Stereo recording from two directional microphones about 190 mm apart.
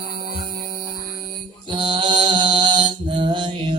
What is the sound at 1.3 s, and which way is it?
Mantra, 25° right (ahead or behind).